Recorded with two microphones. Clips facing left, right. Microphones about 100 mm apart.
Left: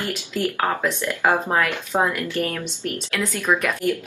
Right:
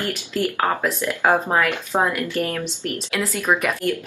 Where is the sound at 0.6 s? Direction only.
10° right (ahead or behind).